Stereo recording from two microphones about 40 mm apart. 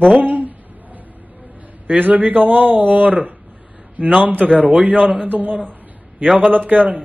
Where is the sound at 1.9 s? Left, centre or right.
Right.